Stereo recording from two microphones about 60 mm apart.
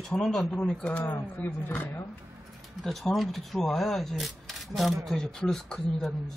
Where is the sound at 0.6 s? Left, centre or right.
Centre.